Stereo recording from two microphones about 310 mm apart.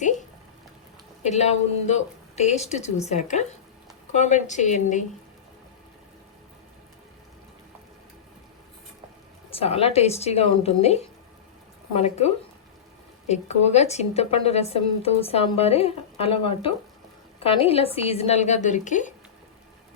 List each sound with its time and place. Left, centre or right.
1.2 s a woman's voice: left
9.6 s a woman's voice: centre